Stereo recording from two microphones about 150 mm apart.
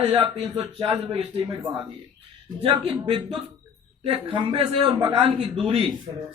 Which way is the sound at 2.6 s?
35° right (ahead or behind).